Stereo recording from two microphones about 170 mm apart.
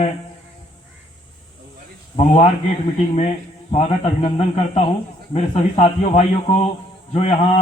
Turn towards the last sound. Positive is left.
turn(degrees=40)  # may be behind; listen again after turning